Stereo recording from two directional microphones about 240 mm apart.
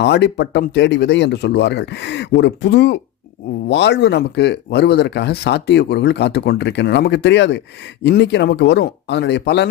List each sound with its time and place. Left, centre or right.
0.0 s speech: left